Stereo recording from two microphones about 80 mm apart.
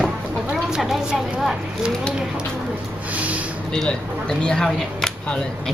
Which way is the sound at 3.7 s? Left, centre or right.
Centre.